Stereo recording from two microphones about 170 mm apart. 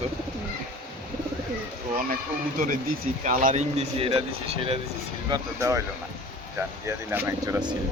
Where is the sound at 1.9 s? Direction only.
55° right (ahead or behind); by 4.7 s 35° right (ahead or behind).